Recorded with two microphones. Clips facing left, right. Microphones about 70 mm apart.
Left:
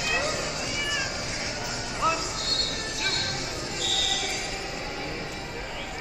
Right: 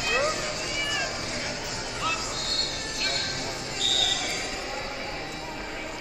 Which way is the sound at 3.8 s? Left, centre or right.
Right.